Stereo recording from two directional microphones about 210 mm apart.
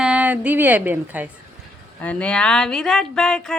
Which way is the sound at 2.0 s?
5° left (ahead or behind).